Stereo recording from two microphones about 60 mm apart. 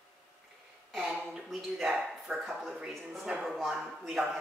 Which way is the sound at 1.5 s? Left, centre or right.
Centre.